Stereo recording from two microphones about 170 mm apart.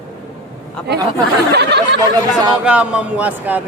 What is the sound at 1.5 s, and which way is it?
Speech, 80° right.